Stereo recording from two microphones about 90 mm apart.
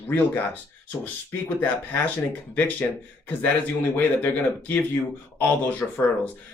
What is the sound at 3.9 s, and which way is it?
Speech, 20° left (ahead or behind).